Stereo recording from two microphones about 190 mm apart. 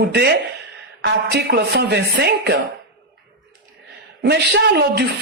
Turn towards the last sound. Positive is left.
turn(degrees=-60)  # may be behind; listen again after turning